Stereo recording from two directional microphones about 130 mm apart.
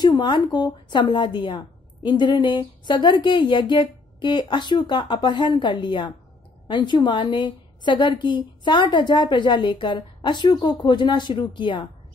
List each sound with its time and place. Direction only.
0.0 s a woman's voice: 35° left (ahead or behind)